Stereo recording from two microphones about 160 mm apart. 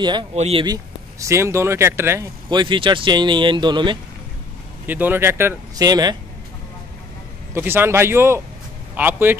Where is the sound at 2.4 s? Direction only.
30° right (ahead or behind).